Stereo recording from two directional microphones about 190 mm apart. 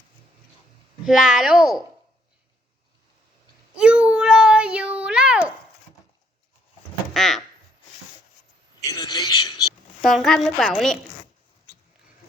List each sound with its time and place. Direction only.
1.0 s a woman's voice: 5° right (ahead or behind)
3.8 s a sound: 5° right (ahead or behind)
7.1 s speech: centre (ahead or behind)
8.8 s speech: 20° left (ahead or behind)
10.0 s a woman's voice: centre (ahead or behind)